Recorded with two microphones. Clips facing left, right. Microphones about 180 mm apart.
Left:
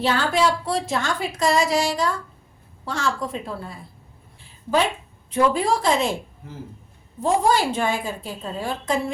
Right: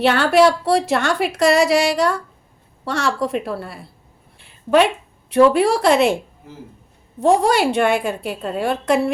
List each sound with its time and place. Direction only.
0.0 s a woman's voice: 70° right (ahead or behind)
4.4 s a sound: 65° right (ahead or behind)
5.3 s a woman's voice: 70° right (ahead or behind)
7.2 s a woman's voice: 70° right (ahead or behind)